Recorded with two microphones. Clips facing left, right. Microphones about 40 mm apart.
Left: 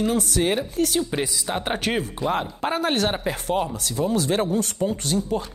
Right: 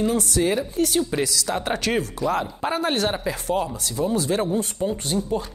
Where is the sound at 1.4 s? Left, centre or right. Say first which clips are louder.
Right 1 dB; left.